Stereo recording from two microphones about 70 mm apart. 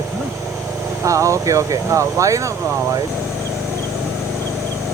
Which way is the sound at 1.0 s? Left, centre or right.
Right.